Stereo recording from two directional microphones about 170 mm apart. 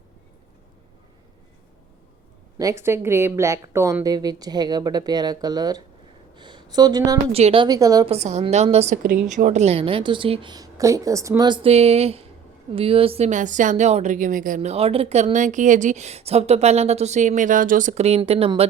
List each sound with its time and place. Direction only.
2.6 s a woman's voice: 20° right (ahead or behind)
7.3 s a woman's voice: 35° right (ahead or behind)
8.0 s a woman's voice: 40° right (ahead or behind)
9.0 s a woman's voice: 55° right (ahead or behind); by 18.7 s 35° right (ahead or behind)